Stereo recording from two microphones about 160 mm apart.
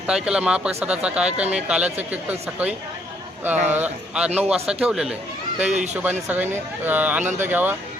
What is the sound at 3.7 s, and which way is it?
A man's voice, 10° right (ahead or behind).